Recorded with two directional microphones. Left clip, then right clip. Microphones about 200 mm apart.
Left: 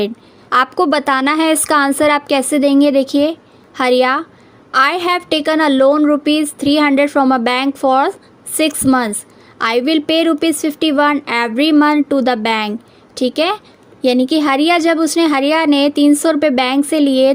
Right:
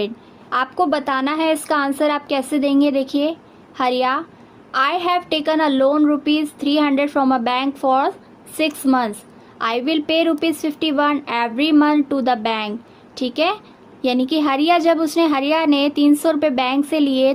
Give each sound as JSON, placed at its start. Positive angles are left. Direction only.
{"t": 0.5, "sound": "a woman's voice", "side_deg": 45}